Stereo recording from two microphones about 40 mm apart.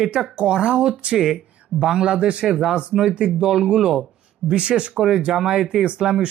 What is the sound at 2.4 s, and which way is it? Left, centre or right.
Speech, centre.